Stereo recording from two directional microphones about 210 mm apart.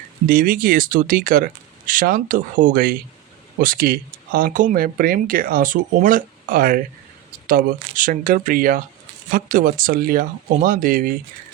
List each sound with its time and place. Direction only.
0.3 s speech: 40° right (ahead or behind)